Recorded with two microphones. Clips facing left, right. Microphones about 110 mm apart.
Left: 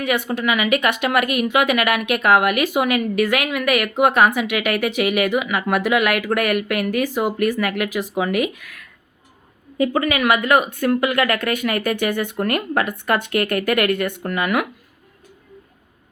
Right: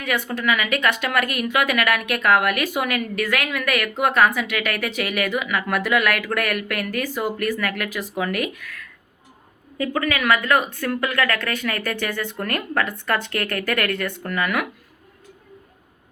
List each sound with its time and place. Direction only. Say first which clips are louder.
0.0 s a woman's voice: left 3 dB; 15° left (ahead or behind)